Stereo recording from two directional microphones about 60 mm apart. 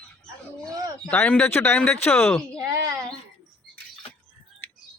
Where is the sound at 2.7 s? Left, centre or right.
Right.